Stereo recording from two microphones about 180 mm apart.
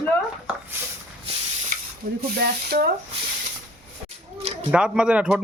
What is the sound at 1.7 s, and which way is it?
Sizzle, 50° right (ahead or behind).